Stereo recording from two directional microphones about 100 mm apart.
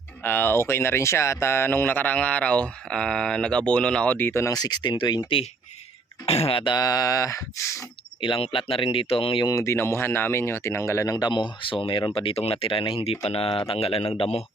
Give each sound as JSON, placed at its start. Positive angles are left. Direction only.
{"t": 0.2, "sound": "speech", "side_deg": 20}
{"t": 4.5, "sound": "speech", "side_deg": 45}
{"t": 6.2, "sound": "speech", "side_deg": 90}
{"t": 6.7, "sound": "speech", "side_deg": 40}
{"t": 8.2, "sound": "speech", "side_deg": 60}
{"t": 9.5, "sound": "speech", "side_deg": 30}
{"t": 11.3, "sound": "speech", "side_deg": 50}